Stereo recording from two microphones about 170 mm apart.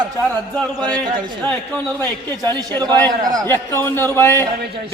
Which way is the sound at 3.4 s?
15° left (ahead or behind).